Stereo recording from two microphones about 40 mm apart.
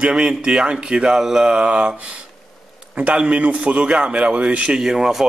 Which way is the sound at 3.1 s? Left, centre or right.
Right.